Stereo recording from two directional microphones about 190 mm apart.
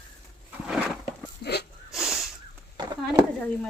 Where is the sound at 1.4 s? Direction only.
60° left (ahead or behind).